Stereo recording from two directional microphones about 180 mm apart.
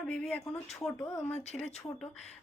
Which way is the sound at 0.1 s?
5° left (ahead or behind).